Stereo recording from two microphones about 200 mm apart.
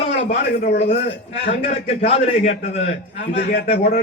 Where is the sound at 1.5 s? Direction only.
35° left (ahead or behind).